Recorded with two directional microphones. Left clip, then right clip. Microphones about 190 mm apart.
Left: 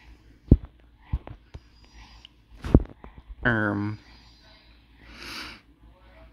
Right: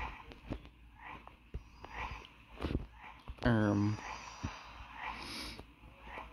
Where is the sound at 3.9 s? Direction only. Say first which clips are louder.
Right 7 dB; 50° right (ahead or behind).